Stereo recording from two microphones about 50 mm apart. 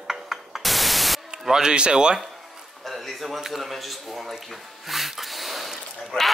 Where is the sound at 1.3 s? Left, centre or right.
Centre.